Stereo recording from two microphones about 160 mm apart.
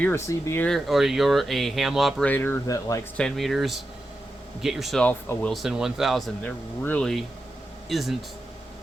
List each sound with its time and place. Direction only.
0.0 s speech: 15° left (ahead or behind)
0.7 s speech: centre (ahead or behind)
2.3 s speech: 15° left (ahead or behind)
3.2 s speech: centre (ahead or behind)